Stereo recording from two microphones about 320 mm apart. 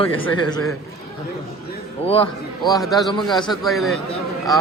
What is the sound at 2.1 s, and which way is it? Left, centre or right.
Speech, centre.